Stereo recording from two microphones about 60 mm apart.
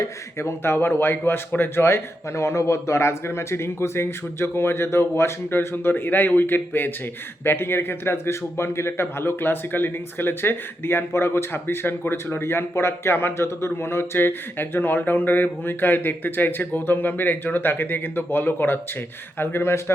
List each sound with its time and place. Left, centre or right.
0.0 s a man's voice: left